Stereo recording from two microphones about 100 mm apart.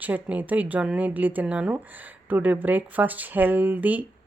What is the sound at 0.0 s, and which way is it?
A woman's voice, 15° right (ahead or behind).